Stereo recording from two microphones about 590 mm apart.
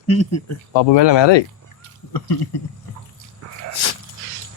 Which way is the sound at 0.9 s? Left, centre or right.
Left.